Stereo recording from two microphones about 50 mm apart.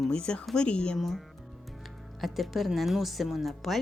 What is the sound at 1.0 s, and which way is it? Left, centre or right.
Speech, centre.